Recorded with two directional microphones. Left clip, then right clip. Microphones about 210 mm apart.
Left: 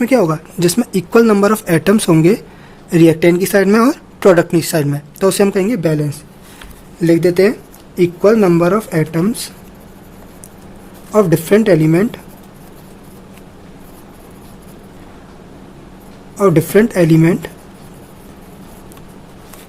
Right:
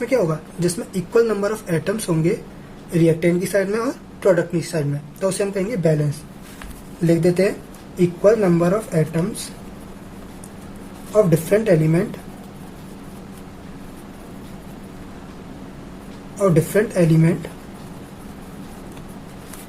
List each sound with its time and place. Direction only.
0.0 s speech: 50° left (ahead or behind)
7.0 s speech: 50° left (ahead or behind)
11.1 s speech: 50° left (ahead or behind)
16.4 s speech: 50° left (ahead or behind)